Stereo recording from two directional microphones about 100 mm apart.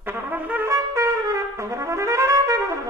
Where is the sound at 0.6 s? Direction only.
30° right (ahead or behind).